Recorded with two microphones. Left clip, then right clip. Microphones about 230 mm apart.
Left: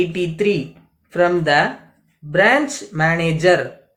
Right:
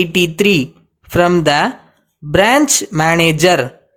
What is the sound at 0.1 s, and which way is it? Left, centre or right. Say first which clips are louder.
Speech: right 6 dB; right.